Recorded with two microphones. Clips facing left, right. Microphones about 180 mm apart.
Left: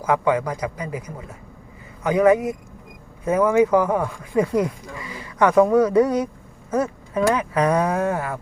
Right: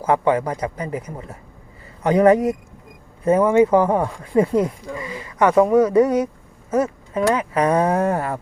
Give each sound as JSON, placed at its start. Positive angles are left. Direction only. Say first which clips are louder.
{"t": 0.0, "sound": "a man's voice", "louder": "right 2 dB", "side_deg": -25}